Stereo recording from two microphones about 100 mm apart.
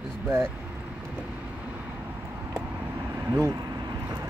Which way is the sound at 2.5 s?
30° right (ahead or behind).